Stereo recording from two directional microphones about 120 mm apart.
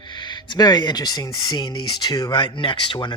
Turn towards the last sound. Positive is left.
turn(degrees=40)  # may be behind; listen again after turning